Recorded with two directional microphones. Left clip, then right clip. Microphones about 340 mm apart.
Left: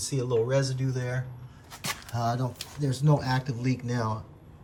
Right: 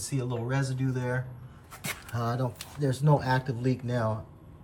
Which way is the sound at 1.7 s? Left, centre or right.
Centre.